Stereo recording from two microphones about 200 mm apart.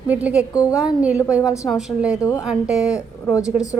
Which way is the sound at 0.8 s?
5° right (ahead or behind).